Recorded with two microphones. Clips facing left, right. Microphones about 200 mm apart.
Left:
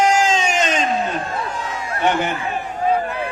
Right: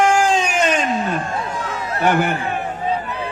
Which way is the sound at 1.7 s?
60° right (ahead or behind).